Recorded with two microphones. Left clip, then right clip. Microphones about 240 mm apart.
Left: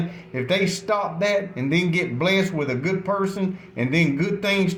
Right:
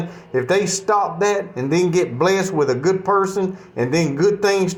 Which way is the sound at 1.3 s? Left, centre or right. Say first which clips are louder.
Right 2 dB; centre.